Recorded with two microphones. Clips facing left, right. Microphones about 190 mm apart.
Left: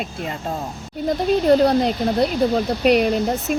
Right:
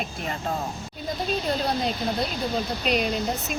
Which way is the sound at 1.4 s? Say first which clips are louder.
Left 13 dB; 70° left (ahead or behind).